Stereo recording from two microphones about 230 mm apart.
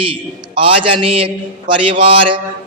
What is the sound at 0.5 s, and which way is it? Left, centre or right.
A man's voice, right.